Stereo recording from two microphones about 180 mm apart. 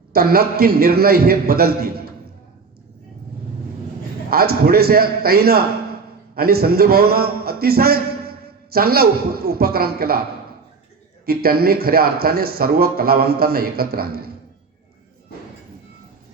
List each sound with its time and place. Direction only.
0.1 s speech: 60° right (ahead or behind)
4.3 s a man's voice: 60° right (ahead or behind)
11.3 s speech: 60° right (ahead or behind)